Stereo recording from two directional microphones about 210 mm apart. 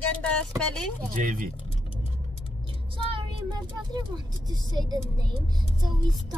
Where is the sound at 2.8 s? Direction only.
25° right (ahead or behind).